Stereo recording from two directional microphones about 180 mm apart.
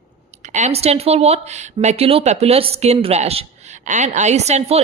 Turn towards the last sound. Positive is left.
turn(degrees=-35)  # may be behind; listen again after turning